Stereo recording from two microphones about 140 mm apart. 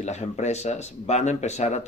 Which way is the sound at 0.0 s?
55° left (ahead or behind).